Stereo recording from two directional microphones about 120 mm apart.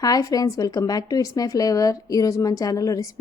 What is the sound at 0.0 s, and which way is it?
Speech, 30° left (ahead or behind).